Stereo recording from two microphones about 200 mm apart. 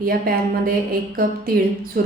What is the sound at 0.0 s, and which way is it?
A woman's voice, 45° right (ahead or behind).